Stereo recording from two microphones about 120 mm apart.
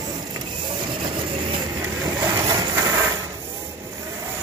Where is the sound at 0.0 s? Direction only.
35° right (ahead or behind).